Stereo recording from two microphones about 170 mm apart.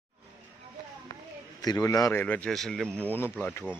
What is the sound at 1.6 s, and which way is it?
A man's voice, 20° left (ahead or behind).